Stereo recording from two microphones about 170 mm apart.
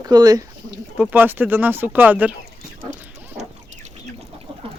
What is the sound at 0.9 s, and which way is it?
Speech, 10° right (ahead or behind).